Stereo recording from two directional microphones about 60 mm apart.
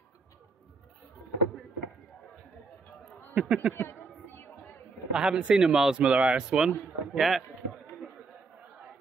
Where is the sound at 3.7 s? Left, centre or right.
Left.